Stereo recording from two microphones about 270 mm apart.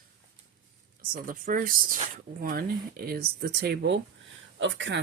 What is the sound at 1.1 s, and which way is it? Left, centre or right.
Speech, right.